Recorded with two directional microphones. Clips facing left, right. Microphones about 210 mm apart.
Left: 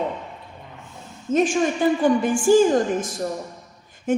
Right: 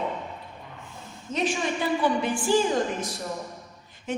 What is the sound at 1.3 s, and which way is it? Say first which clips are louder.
A woman's voice: left 7 dB; 50° left (ahead or behind).